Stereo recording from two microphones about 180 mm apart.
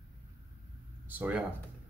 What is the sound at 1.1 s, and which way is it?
Speech, 10° right (ahead or behind).